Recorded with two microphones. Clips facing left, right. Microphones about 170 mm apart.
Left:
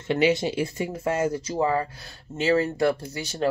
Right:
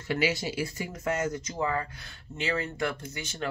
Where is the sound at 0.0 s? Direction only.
25° left (ahead or behind).